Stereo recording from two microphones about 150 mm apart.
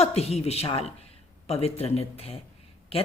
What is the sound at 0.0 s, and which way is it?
A woman's voice, 45° left (ahead or behind).